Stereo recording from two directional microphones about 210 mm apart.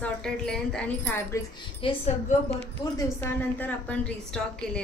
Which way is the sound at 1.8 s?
25° left (ahead or behind).